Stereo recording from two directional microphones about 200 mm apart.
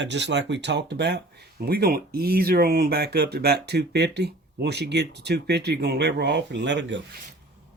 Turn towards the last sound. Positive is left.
turn(degrees=-60)  # may be behind; listen again after turning